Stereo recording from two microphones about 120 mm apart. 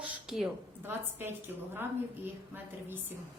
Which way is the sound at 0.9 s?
20° right (ahead or behind).